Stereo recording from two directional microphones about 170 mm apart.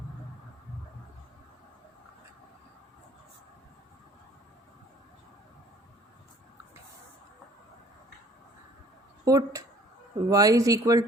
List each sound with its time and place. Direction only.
9.2 s speech: 20° right (ahead or behind)